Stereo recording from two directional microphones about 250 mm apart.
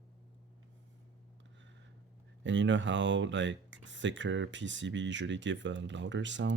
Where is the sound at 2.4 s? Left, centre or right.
Right.